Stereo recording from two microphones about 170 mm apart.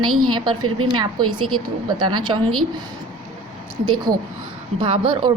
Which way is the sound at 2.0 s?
25° right (ahead or behind).